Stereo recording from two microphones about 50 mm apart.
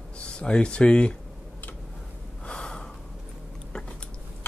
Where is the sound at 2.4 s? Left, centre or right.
Centre.